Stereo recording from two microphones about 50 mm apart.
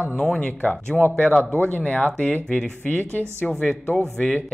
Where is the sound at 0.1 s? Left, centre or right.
Centre.